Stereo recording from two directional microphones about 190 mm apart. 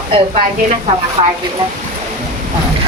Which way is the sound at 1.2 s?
30° right (ahead or behind).